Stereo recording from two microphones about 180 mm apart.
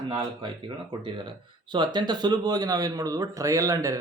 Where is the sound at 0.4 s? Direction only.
25° right (ahead or behind).